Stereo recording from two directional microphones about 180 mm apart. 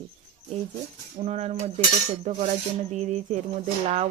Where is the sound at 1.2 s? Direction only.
35° right (ahead or behind).